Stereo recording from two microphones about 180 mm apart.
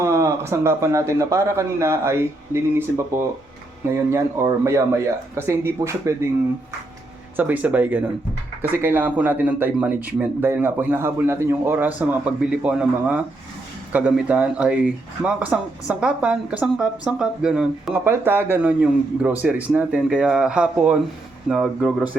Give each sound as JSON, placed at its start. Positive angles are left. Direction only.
{"t": 0.0, "sound": "speech", "side_deg": -15}
{"t": 7.3, "sound": "speech", "side_deg": -10}